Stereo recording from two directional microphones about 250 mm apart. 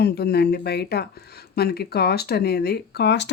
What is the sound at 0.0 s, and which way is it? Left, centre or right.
Speech, left.